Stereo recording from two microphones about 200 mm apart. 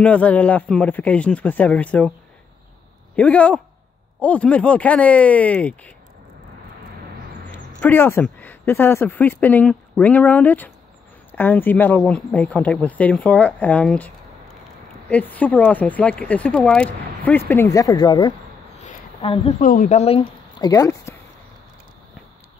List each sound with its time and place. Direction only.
0.0 s speech: 5° left (ahead or behind)
3.2 s speech: 5° left (ahead or behind)
7.8 s speech: 10° left (ahead or behind); by 19.5 s 25° left (ahead or behind)
19.6 s speech: 40° left (ahead or behind)
20.5 s speech: 20° left (ahead or behind)